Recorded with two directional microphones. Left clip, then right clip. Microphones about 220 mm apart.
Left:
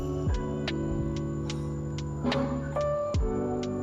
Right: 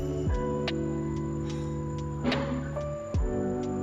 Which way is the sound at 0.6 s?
Centre (ahead or behind).